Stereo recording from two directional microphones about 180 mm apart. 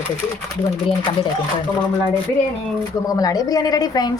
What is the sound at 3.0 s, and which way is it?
A woman's voice, 20° left (ahead or behind).